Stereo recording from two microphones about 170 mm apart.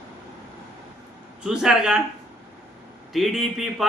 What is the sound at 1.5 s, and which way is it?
Speech, 5° right (ahead or behind).